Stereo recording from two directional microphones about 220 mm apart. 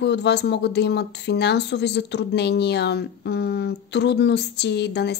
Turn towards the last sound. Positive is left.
turn(degrees=50)  # may be behind; listen again after turning